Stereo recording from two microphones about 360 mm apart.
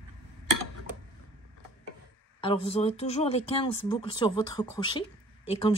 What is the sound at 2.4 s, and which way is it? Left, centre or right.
Speech, centre.